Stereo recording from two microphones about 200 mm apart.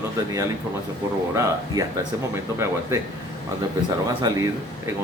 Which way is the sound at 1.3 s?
15° right (ahead or behind).